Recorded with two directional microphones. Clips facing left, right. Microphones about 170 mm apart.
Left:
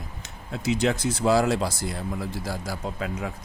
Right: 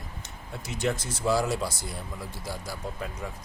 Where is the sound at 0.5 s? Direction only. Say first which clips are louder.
Left 6 dB; 90° left.